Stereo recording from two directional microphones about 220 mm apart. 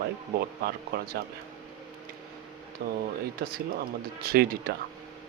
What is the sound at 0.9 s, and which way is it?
Speech, 40° right (ahead or behind).